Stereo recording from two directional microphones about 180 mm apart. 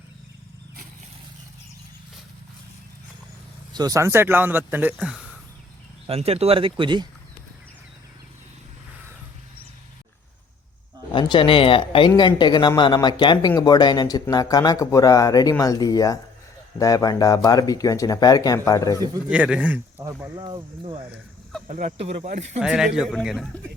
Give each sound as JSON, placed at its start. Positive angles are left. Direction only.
{"t": 3.7, "sound": "speech", "side_deg": -20}
{"t": 6.1, "sound": "speech", "side_deg": -35}
{"t": 11.1, "sound": "speech", "side_deg": 25}
{"t": 19.3, "sound": "speech", "side_deg": -5}
{"t": 20.4, "sound": "speech", "side_deg": -30}
{"t": 21.7, "sound": "speech", "side_deg": -50}
{"t": 22.5, "sound": "speech", "side_deg": -5}